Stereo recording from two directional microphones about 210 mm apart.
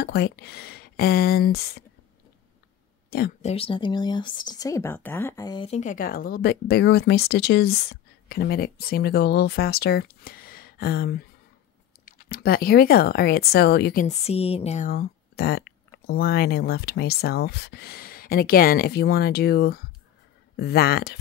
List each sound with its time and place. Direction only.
0.0 s speech: 55° left (ahead or behind)
3.1 s speech: 50° left (ahead or behind)
3.4 s speech: 25° left (ahead or behind); by 14.0 s 50° left (ahead or behind)
14.0 s speech: 30° left (ahead or behind)
14.9 s speech: 45° left (ahead or behind)